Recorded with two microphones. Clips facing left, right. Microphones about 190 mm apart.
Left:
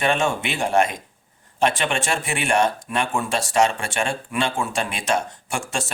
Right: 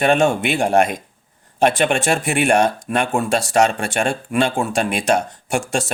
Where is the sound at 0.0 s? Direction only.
55° right (ahead or behind).